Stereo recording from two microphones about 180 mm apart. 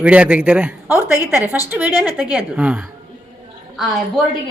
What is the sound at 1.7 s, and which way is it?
A woman's voice, 10° right (ahead or behind).